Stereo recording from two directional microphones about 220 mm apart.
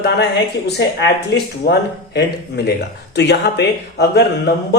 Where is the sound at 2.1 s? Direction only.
50° left (ahead or behind).